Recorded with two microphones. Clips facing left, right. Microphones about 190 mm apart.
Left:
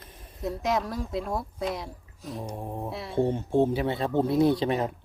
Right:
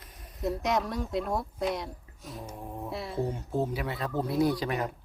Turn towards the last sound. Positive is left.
turn(degrees=25)  # may be behind; listen again after turning